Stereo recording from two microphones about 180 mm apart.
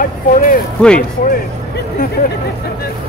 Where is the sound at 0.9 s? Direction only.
50° left (ahead or behind).